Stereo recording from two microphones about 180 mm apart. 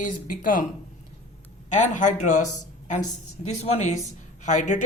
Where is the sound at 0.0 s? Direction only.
50° left (ahead or behind).